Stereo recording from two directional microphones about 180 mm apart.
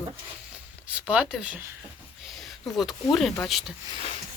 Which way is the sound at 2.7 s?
Centre (ahead or behind).